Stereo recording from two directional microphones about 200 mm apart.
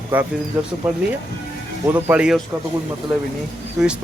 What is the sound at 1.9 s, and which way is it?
Speech, 5° right (ahead or behind).